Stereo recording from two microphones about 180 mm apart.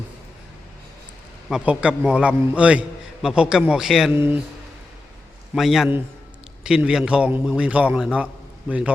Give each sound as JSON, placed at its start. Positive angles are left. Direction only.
{"t": 1.5, "sound": "a man's voice", "side_deg": -5}
{"t": 4.1, "sound": "speech", "side_deg": -15}
{"t": 5.5, "sound": "a man's voice", "side_deg": 0}